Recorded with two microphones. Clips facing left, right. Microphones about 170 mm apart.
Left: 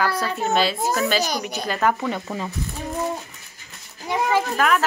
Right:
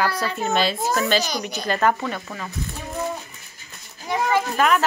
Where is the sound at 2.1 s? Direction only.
20° left (ahead or behind).